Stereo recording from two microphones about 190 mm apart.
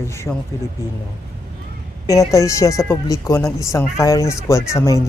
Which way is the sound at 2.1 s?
15° left (ahead or behind).